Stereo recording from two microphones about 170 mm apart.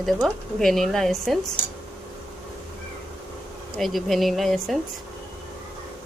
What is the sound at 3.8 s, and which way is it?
Speech, centre (ahead or behind).